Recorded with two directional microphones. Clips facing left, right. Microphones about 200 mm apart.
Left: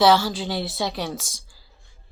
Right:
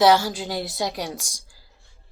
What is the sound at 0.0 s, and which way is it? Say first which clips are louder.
Speech: even; 45° right (ahead or behind).